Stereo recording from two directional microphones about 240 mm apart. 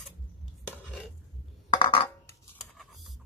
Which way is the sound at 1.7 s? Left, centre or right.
Centre.